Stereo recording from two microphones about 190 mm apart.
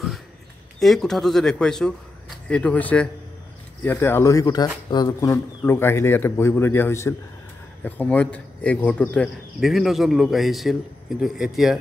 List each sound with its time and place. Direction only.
0.7 s a man's voice: centre (ahead or behind)